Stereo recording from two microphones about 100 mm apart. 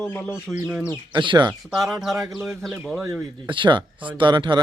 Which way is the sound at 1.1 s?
50° right (ahead or behind).